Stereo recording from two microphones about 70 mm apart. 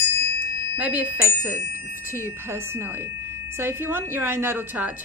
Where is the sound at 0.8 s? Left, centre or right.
Right.